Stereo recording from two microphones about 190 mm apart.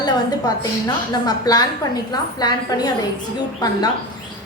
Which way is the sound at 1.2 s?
20° left (ahead or behind).